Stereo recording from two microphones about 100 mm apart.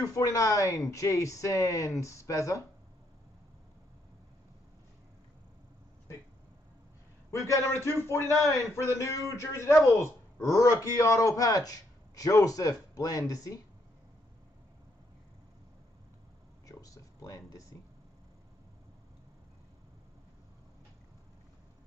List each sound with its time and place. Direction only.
0.0 s a man's voice: 35° left (ahead or behind)
7.2 s a man's voice: 30° left (ahead or behind)
16.6 s a sound: 35° left (ahead or behind)